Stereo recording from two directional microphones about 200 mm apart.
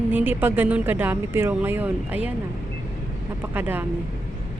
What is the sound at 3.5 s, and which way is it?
Speech, 10° right (ahead or behind).